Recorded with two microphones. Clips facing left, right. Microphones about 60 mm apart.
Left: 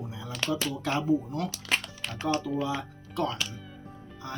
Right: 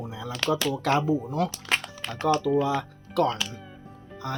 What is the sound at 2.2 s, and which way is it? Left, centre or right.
Speech, right.